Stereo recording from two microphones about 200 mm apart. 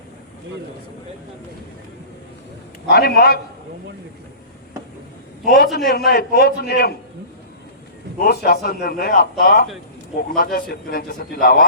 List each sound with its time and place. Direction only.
2.8 s a man's voice: 55° left (ahead or behind)
5.5 s a man's voice: 45° left (ahead or behind)
8.2 s a man's voice: 50° left (ahead or behind)